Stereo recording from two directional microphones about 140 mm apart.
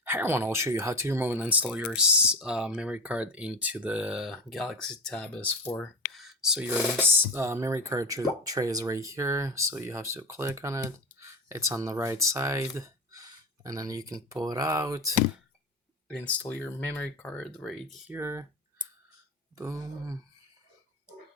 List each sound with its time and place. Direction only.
0.0 s speech: 15° right (ahead or behind)
16.0 s speech: 10° left (ahead or behind)
18.1 s speech: 15° right (ahead or behind)
19.5 s speech: 20° right (ahead or behind)